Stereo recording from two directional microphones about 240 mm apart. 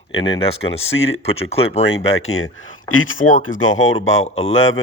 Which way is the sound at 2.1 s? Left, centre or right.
Left.